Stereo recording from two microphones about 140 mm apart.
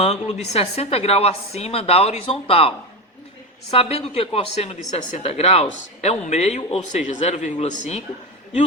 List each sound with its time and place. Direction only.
0.0 s a woman's voice: 50° left (ahead or behind)
6.6 s a woman's voice: 45° left (ahead or behind)
6.9 s speech: 60° left (ahead or behind)